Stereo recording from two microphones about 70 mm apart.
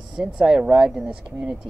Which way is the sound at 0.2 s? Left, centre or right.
Centre.